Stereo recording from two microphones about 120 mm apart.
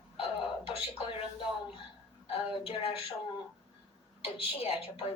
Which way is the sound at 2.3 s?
50° left (ahead or behind).